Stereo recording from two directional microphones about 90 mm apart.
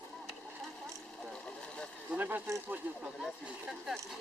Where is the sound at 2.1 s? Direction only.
20° right (ahead or behind).